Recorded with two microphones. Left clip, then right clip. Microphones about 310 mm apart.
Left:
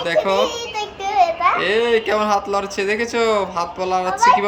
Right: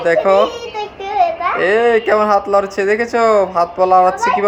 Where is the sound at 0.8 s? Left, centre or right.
Centre.